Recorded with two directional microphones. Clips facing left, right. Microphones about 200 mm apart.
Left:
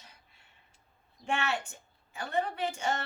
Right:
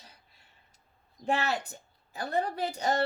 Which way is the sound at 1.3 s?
35° right (ahead or behind).